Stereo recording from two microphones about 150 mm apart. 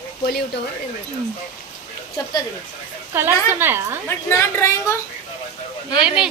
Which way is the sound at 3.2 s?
15° right (ahead or behind).